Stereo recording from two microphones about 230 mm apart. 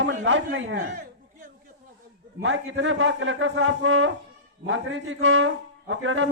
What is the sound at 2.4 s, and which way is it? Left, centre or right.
A man's voice, right.